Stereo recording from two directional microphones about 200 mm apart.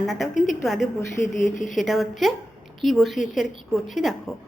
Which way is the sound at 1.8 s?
Centre (ahead or behind).